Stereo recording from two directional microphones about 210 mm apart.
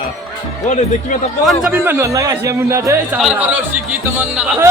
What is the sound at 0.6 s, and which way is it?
Speech, 35° left (ahead or behind).